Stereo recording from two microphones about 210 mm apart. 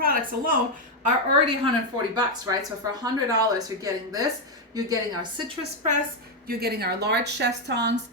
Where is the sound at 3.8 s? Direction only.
15° right (ahead or behind).